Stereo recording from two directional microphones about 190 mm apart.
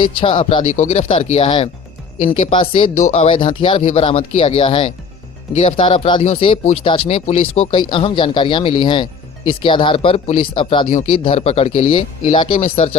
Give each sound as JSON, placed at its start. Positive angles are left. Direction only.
{"t": 0.2, "sound": "speech", "side_deg": 30}
{"t": 0.7, "sound": "speech", "side_deg": 40}
{"t": 2.9, "sound": "speech", "side_deg": 40}
{"t": 3.2, "sound": "speech", "side_deg": 25}
{"t": 5.5, "sound": "speech", "side_deg": 35}
{"t": 5.8, "sound": "speech", "side_deg": 25}
{"t": 12.3, "sound": "speech", "side_deg": 25}
{"t": 12.5, "sound": "speech", "side_deg": 35}